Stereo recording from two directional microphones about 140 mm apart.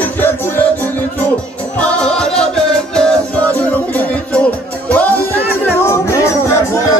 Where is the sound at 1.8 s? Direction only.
5° left (ahead or behind); by 6.6 s 20° left (ahead or behind).